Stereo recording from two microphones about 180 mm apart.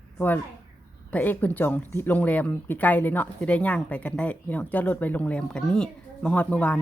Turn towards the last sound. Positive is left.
turn(degrees=10)  # may be behind; listen again after turning